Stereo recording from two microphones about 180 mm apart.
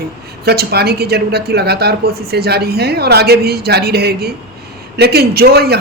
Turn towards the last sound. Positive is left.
turn(degrees=-60)  # may be behind; listen again after turning